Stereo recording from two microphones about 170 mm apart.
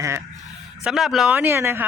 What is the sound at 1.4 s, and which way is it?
Speech, 15° right (ahead or behind).